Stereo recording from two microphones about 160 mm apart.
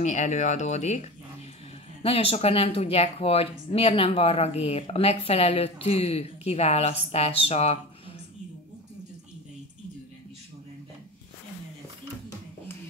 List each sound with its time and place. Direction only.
0.0 s speech: 50° left (ahead or behind)